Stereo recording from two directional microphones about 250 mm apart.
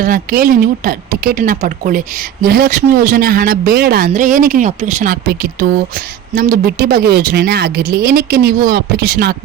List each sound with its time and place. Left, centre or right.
0.0 s speech: right